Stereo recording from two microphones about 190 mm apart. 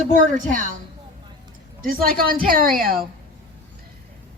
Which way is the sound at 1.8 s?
50° right (ahead or behind).